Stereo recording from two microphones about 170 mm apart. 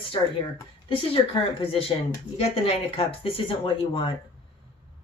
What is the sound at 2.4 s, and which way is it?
Speech, 35° left (ahead or behind).